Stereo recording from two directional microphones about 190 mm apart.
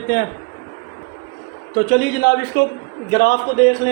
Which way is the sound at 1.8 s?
55° left (ahead or behind).